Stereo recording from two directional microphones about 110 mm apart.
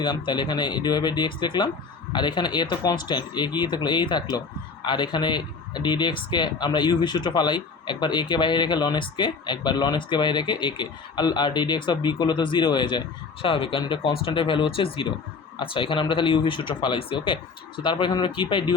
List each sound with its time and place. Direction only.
0.0 s speech: 45° left (ahead or behind)